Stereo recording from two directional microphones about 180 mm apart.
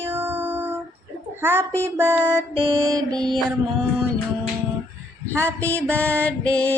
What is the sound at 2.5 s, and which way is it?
Music, 25° right (ahead or behind).